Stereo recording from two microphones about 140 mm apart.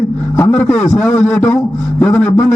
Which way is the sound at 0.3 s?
20° left (ahead or behind).